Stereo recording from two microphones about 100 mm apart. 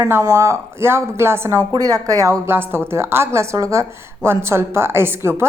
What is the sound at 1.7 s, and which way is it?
Speech, 40° right (ahead or behind).